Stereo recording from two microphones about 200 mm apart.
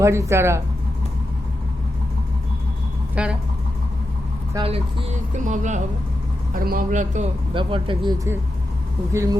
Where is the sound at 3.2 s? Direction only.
5° right (ahead or behind).